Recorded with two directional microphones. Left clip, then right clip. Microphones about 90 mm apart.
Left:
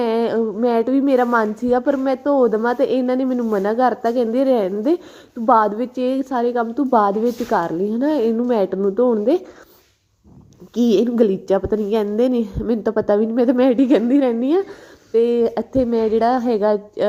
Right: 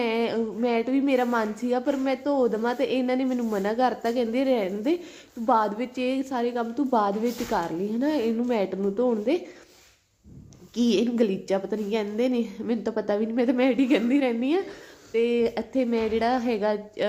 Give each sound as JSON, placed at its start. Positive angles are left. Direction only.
{"t": 0.0, "sound": "a woman's voice", "side_deg": 55}
{"t": 3.3, "sound": "speech", "side_deg": 25}
{"t": 3.7, "sound": "a woman's voice", "side_deg": 45}
{"t": 10.8, "sound": "a woman's voice", "side_deg": 60}